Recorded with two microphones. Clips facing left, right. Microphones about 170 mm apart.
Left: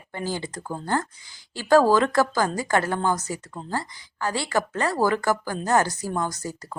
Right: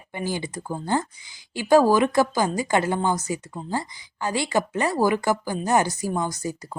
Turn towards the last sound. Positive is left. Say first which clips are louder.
# right 2 dB
turn(degrees=-10)  # may be behind; listen again after turning